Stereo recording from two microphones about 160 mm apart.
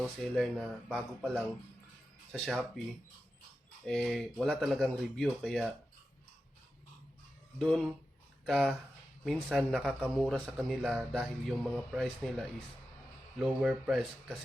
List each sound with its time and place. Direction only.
0.0 s speech: centre (ahead or behind)
3.8 s speech: centre (ahead or behind)
7.6 s speech: 5° left (ahead or behind)